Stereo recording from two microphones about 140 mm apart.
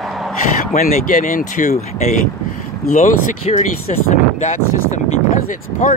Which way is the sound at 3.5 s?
50° left (ahead or behind).